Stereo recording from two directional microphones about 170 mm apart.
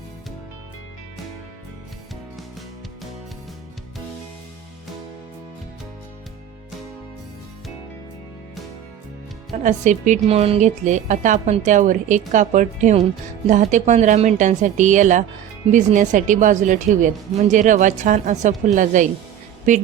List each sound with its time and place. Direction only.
9.6 s a woman's voice: 45° right (ahead or behind)